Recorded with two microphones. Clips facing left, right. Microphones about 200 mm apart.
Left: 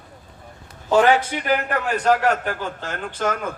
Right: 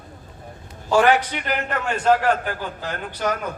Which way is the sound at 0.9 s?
20° left (ahead or behind).